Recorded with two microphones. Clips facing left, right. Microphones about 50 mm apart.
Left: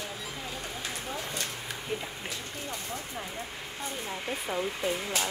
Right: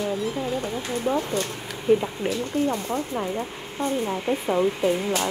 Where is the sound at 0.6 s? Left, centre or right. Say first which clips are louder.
Right 9 dB; right.